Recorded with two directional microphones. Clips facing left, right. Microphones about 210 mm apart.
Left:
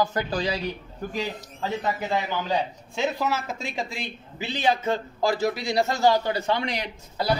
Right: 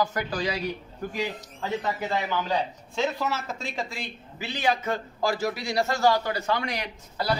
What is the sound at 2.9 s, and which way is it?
A man's voice, 10° left (ahead or behind).